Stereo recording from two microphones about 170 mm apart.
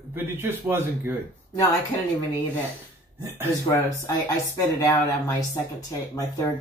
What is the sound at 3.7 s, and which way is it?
Speech, 15° left (ahead or behind).